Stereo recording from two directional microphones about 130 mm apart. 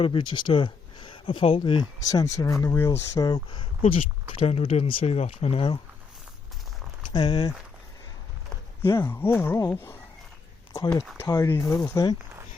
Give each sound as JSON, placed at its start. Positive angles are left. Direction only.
{"t": 0.0, "sound": "speech", "side_deg": 40}
{"t": 2.0, "sound": "speech", "side_deg": 25}
{"t": 3.2, "sound": "speech", "side_deg": 30}
{"t": 7.1, "sound": "speech", "side_deg": 35}
{"t": 8.8, "sound": "speech", "side_deg": 30}
{"t": 9.0, "sound": "speech", "side_deg": 15}
{"t": 11.2, "sound": "speech", "side_deg": 20}